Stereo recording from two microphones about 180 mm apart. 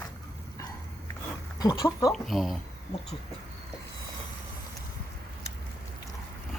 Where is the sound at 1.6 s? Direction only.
20° left (ahead or behind).